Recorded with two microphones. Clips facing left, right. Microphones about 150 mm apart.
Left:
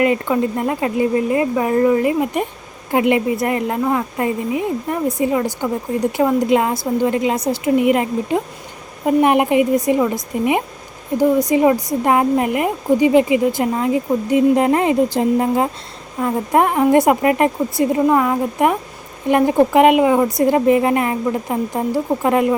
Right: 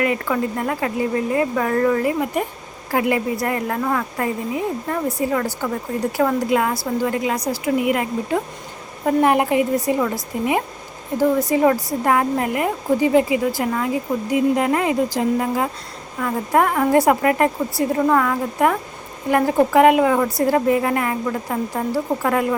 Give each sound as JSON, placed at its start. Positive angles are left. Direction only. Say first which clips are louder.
{"t": 0.0, "sound": "a woman's voice", "louder": "left 4 dB", "side_deg": 25}